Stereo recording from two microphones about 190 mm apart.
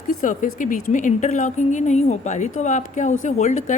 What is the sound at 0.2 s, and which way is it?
A woman's voice, 45° left (ahead or behind).